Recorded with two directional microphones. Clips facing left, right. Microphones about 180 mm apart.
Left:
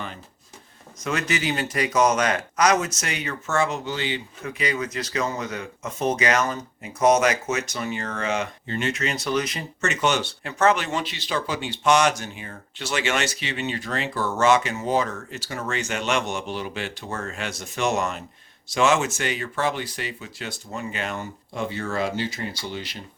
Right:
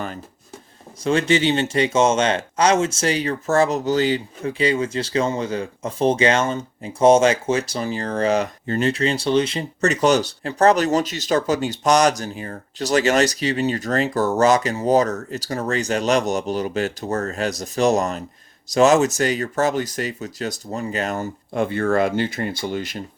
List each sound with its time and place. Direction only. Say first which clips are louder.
1.0 s speech: right 8 dB; 30° right (ahead or behind); by 23.0 s 50° right (ahead or behind)